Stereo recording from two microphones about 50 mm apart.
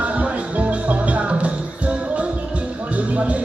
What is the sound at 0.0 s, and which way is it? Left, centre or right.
Music, right.